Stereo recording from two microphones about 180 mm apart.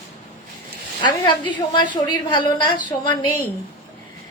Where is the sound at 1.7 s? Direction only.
25° left (ahead or behind).